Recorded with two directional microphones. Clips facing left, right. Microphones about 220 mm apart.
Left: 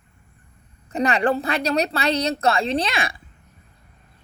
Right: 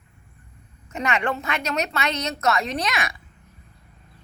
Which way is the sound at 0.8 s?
35° left (ahead or behind).